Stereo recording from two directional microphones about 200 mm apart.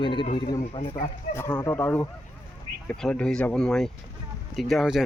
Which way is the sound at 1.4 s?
15° left (ahead or behind).